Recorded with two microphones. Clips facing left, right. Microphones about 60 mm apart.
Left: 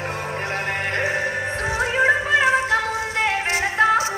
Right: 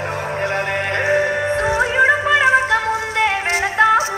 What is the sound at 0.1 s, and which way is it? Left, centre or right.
Music, right.